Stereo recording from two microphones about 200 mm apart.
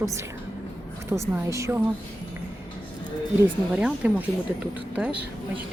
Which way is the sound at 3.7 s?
5° right (ahead or behind).